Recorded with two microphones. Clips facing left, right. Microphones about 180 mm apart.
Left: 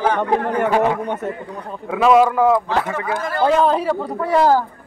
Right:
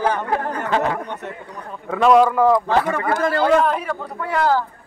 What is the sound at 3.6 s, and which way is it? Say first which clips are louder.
Speech: left 4 dB; 30° left (ahead or behind).